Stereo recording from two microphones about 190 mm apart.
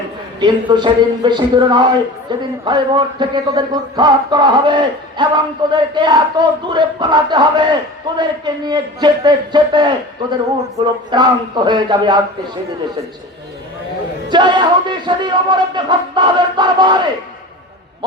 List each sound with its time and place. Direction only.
0.3 s speech: 25° right (ahead or behind)
14.3 s speech: 25° right (ahead or behind)